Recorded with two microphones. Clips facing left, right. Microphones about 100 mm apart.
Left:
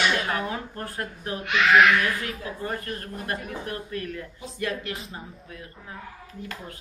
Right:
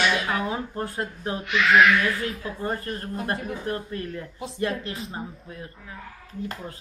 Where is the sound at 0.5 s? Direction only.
20° right (ahead or behind).